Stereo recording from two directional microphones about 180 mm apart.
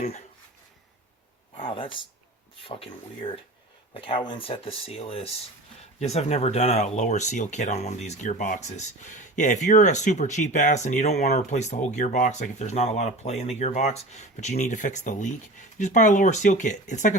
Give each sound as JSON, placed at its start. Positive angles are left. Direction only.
{"t": 1.5, "sound": "speech", "side_deg": 30}